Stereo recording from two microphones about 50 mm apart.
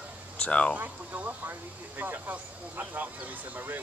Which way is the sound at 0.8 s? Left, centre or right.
Right.